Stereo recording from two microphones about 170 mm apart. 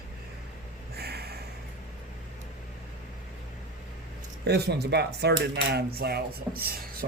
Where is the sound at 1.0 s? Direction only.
70° right (ahead or behind).